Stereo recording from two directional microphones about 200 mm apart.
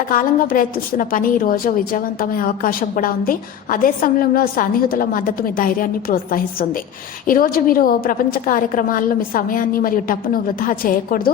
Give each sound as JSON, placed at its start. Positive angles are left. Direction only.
{"t": 0.1, "sound": "a woman's voice", "side_deg": 45}